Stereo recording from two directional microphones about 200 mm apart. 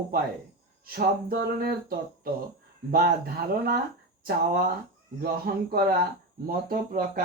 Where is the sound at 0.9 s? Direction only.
50° right (ahead or behind).